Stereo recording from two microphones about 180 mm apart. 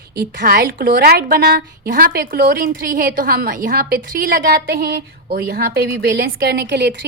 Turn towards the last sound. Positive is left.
turn(degrees=-75)  # may be behind; listen again after turning